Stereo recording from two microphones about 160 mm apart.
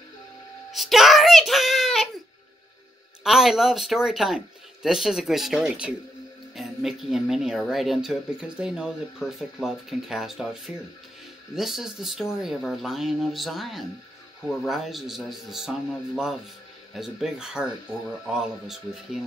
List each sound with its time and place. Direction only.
0.7 s a child's voice: centre (ahead or behind)
3.3 s speech: centre (ahead or behind)
16.9 s speech: 5° right (ahead or behind)